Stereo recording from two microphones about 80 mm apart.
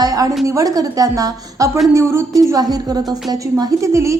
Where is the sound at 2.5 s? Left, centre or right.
Right.